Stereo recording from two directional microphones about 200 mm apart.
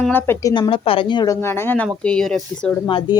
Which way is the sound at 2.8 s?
20° left (ahead or behind).